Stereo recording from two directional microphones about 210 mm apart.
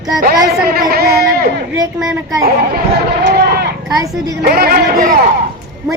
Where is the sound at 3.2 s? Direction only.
50° right (ahead or behind).